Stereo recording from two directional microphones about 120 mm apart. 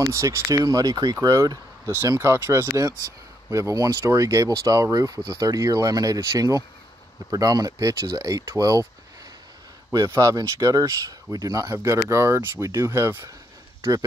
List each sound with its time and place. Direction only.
0.0 s speech: 25° right (ahead or behind)
9.9 s speech: 25° right (ahead or behind)
13.7 s a sound: 25° right (ahead or behind)